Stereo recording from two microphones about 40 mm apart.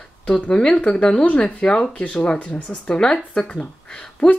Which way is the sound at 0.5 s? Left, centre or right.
Left.